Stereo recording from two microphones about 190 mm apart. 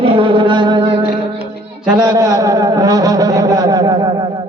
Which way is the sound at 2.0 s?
20° right (ahead or behind).